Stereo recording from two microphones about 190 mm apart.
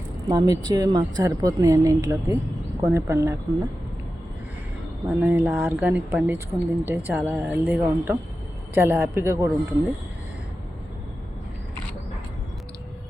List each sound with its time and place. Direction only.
0.3 s speech: 20° right (ahead or behind)
5.0 s speech: 10° right (ahead or behind)